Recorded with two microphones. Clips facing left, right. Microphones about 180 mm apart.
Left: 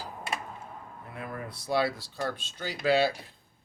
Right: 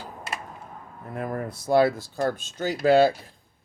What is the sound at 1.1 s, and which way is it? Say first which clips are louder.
Speech: right 9 dB; 45° right (ahead or behind).